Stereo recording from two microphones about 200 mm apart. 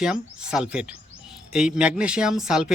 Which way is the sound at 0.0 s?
5° right (ahead or behind).